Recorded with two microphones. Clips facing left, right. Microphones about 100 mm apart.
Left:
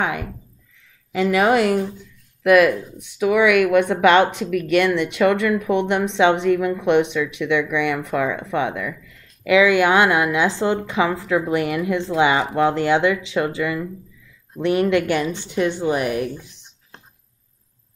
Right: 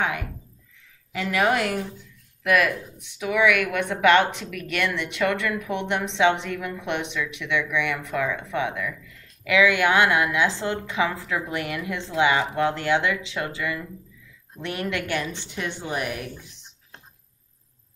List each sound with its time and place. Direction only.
1.1 s speech: 15° left (ahead or behind)
15.3 s speech: 10° left (ahead or behind)